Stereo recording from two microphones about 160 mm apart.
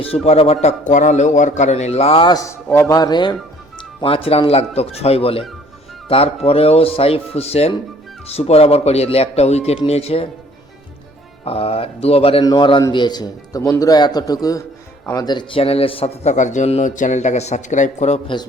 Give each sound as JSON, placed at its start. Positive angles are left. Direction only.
{"t": 0.0, "sound": "a man's voice", "side_deg": 40}
{"t": 11.4, "sound": "a man's voice", "side_deg": 35}